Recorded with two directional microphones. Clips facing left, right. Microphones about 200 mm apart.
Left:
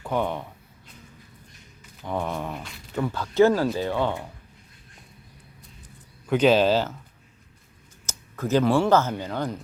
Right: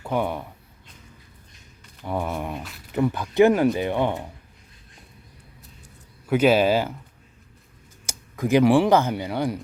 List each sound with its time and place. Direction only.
0.0 s speech: 10° right (ahead or behind)
2.0 s speech: 10° right (ahead or behind)
6.2 s speech: 5° right (ahead or behind)
8.0 s speech: 15° right (ahead or behind)